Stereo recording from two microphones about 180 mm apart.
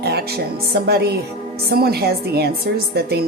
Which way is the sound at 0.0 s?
60° right (ahead or behind).